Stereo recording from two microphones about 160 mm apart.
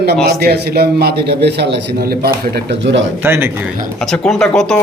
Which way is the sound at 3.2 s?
15° right (ahead or behind).